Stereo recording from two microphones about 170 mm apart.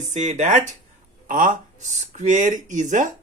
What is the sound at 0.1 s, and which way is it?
Speech, 45° right (ahead or behind).